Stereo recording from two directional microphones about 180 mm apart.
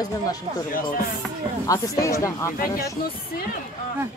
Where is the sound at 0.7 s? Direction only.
50° left (ahead or behind).